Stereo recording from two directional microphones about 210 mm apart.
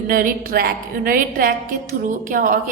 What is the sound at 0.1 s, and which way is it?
A woman's voice, 40° right (ahead or behind).